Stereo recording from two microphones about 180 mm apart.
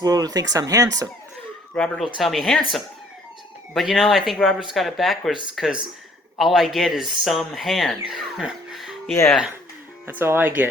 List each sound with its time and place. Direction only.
0.0 s speech: 20° right (ahead or behind)
1.7 s speech: 5° left (ahead or behind)
3.8 s speech: centre (ahead or behind)